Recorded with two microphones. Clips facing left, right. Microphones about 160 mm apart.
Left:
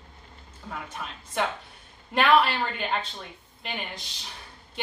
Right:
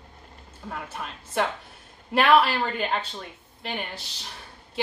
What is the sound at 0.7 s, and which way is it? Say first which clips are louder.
A woman's voice: right 1 dB; centre (ahead or behind).